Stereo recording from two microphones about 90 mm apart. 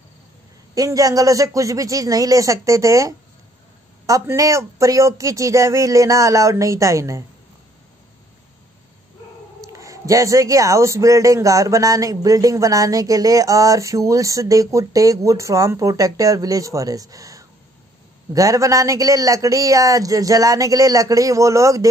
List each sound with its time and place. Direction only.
0.7 s speech: 40° right (ahead or behind)
9.6 s speech: 35° right (ahead or behind)